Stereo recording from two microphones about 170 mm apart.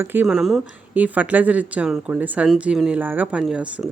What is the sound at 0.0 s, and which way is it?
Speech, 10° right (ahead or behind).